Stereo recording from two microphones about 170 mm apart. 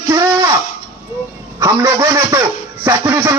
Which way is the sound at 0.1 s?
20° right (ahead or behind).